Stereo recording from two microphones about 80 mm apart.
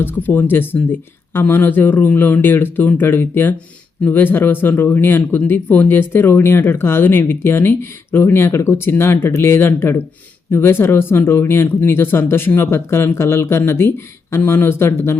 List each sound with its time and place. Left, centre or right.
0.0 s speech: left